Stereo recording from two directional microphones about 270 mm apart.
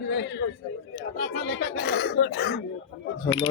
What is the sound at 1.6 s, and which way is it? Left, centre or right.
Cough, left.